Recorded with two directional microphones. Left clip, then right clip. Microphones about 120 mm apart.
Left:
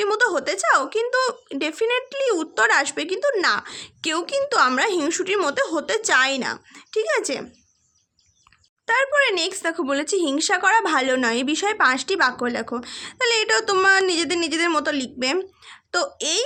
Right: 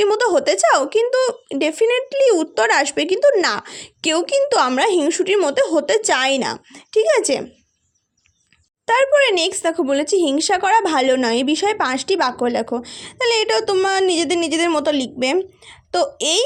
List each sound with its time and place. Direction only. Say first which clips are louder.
0.0 s speech: right 5 dB; 40° right (ahead or behind)
8.9 s speech: right 5 dB; 40° right (ahead or behind)
15.6 s a sound: right 5 dB; 25° right (ahead or behind)